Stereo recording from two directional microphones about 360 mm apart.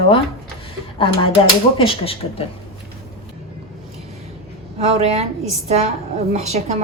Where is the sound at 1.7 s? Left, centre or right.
Centre.